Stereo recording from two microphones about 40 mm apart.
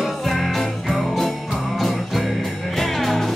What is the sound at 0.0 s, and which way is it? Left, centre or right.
Music, centre.